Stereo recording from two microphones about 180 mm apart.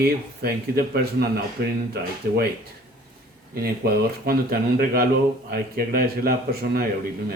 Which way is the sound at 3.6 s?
55° right (ahead or behind).